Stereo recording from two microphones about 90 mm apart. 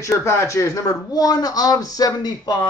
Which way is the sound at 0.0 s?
35° left (ahead or behind).